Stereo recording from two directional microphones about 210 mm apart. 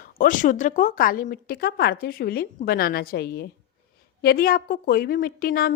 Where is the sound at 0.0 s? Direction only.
40° left (ahead or behind).